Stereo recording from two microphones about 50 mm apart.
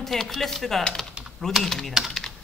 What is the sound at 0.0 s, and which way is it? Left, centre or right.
A man's voice, centre.